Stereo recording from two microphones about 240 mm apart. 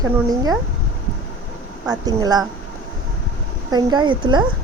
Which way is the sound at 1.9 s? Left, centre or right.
Centre.